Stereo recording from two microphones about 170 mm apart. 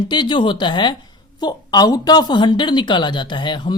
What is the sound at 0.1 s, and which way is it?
Speech, 30° left (ahead or behind).